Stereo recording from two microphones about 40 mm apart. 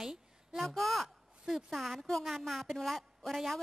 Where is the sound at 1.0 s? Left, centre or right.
Centre.